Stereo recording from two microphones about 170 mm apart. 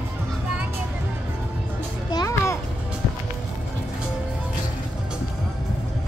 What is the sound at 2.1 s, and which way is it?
Children playing, 15° left (ahead or behind).